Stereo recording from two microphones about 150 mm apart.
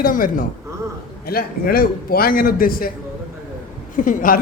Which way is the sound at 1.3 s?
80° left.